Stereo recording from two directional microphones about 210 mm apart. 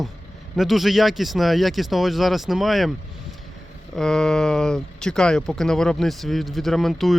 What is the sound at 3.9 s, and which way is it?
Speech, 5° left (ahead or behind).